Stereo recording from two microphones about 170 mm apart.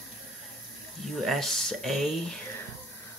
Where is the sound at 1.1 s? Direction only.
Centre (ahead or behind).